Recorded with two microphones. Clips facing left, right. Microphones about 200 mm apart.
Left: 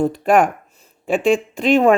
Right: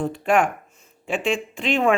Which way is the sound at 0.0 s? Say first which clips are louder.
Left 5 dB; 40° left (ahead or behind).